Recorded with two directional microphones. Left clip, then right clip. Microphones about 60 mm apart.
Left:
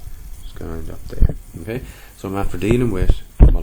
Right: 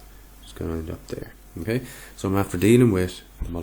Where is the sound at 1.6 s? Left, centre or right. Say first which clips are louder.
Right 2 dB; right.